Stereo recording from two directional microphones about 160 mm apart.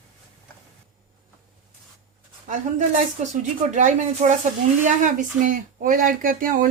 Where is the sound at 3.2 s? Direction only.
50° right (ahead or behind).